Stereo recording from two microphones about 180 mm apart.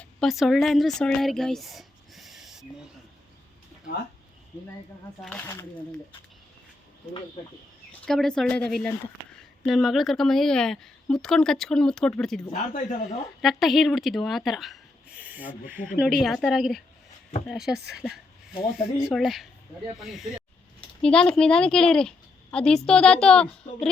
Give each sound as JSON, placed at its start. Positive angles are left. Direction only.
{"t": 0.0, "sound": "speech", "side_deg": 0}
{"t": 5.2, "sound": "a woman's voice", "side_deg": 5}
{"t": 8.0, "sound": "a woman's voice", "side_deg": 5}
{"t": 12.7, "sound": "speech", "side_deg": 50}
{"t": 13.4, "sound": "a woman's voice", "side_deg": 0}